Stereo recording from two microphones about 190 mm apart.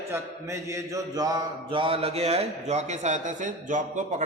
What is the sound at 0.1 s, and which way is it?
Mantra, 15° right (ahead or behind).